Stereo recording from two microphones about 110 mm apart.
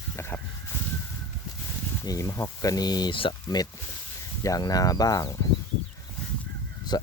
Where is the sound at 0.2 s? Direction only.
20° left (ahead or behind).